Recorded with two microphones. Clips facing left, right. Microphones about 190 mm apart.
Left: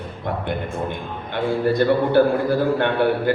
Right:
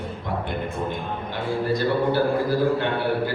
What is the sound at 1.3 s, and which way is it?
Speech, 60° left (ahead or behind).